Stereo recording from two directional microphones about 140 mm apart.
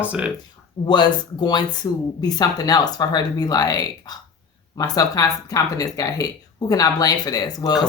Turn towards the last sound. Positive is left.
turn(degrees=30)  # may be behind; listen again after turning